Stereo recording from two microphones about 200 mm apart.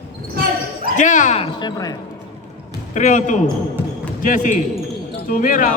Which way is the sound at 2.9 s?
40° left (ahead or behind).